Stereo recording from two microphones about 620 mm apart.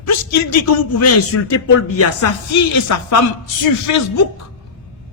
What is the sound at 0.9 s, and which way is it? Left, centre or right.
A man's voice, left.